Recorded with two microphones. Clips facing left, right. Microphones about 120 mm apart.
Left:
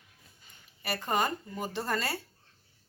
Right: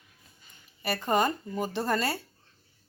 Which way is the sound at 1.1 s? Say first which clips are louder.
Right 4 dB; 25° right (ahead or behind).